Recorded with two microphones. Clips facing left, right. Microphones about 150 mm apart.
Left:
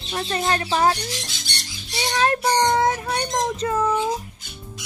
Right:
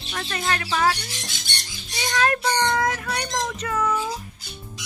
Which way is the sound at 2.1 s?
25° left (ahead or behind).